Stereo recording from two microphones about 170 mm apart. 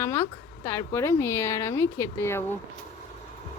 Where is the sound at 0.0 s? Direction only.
15° left (ahead or behind).